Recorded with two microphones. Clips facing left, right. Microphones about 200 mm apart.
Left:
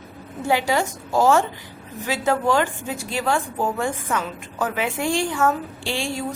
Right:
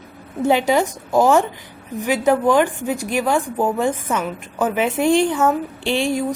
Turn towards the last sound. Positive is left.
turn(degrees=-20)  # may be behind; listen again after turning